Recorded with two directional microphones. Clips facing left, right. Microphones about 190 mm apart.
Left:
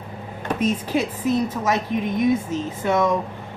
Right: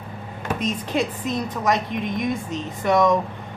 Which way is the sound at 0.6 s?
5° left (ahead or behind).